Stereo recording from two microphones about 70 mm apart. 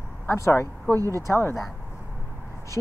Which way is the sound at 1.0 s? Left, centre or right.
Right.